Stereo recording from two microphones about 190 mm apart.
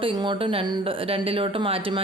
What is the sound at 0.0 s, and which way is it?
Speech, 25° right (ahead or behind).